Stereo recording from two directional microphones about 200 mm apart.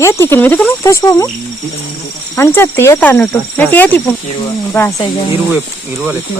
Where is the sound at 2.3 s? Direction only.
10° left (ahead or behind).